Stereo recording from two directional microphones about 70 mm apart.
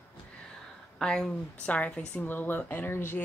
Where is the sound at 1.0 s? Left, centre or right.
Centre.